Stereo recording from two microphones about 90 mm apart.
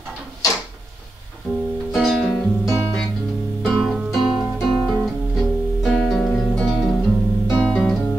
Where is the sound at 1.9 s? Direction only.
Centre (ahead or behind).